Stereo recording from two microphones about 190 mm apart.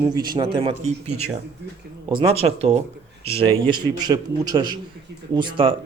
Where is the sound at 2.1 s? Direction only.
30° right (ahead or behind).